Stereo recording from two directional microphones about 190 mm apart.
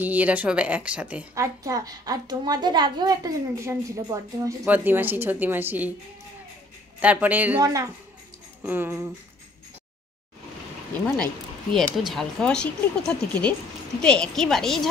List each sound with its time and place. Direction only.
0.0 s speech: 10° right (ahead or behind)
7.0 s speech: 10° right (ahead or behind)
11.7 s speech: centre (ahead or behind)